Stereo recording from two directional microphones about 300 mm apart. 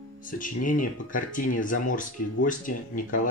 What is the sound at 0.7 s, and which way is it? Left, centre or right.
Speech, left.